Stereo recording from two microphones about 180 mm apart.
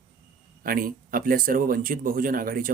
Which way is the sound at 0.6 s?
50° right (ahead or behind).